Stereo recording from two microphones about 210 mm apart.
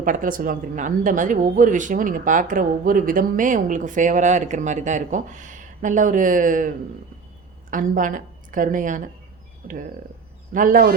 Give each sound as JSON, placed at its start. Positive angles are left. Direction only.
{"t": 0.0, "sound": "speech", "side_deg": -40}
{"t": 7.7, "sound": "a woman's voice", "side_deg": -40}